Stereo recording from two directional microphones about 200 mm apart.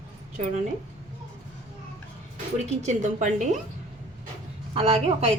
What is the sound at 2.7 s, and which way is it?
Speech, 35° right (ahead or behind).